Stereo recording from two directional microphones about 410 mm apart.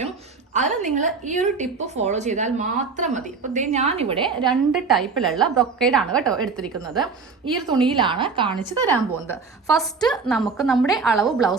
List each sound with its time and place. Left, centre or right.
0.5 s a woman's voice: centre
4.9 s a woman's voice: centre
7.9 s a woman's voice: centre
8.9 s a woman's voice: centre